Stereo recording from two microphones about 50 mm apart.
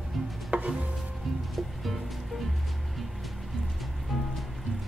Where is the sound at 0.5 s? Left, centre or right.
Right.